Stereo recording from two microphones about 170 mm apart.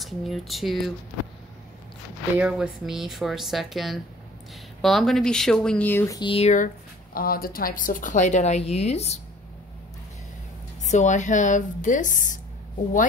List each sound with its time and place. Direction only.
0.0 s speech: centre (ahead or behind)
2.3 s speech: 5° right (ahead or behind); by 6.5 s 30° left (ahead or behind)
7.2 s a woman's voice: 60° left (ahead or behind); by 9.2 s 40° left (ahead or behind)
10.9 s a woman's voice: 45° left (ahead or behind)